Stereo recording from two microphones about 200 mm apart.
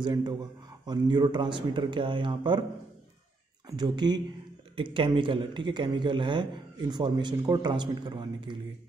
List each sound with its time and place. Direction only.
0.0 s a man's voice: 20° right (ahead or behind)
3.6 s a man's voice: 20° right (ahead or behind)